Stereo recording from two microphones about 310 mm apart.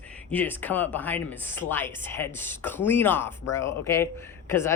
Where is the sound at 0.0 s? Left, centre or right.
Centre.